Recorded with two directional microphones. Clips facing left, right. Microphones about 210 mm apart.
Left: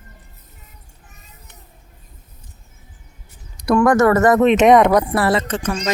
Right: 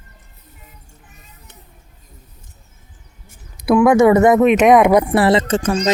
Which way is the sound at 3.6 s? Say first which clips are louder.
Right 3 dB; 5° right (ahead or behind).